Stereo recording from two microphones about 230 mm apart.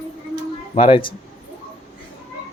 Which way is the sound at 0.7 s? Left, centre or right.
Left.